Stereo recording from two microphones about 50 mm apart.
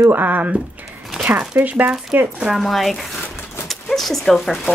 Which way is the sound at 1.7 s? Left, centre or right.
Right.